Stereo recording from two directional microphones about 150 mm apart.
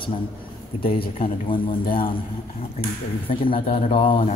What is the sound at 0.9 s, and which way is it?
Speech, 75° left (ahead or behind).